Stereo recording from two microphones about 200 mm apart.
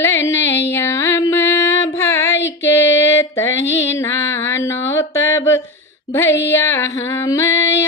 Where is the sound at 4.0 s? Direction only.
10° left (ahead or behind).